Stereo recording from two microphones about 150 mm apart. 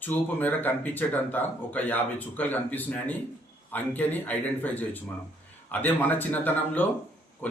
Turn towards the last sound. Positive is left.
turn(degrees=10)  # may be behind; listen again after turning